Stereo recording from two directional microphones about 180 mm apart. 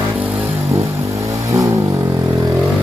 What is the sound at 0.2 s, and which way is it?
Vehicle, 10° right (ahead or behind).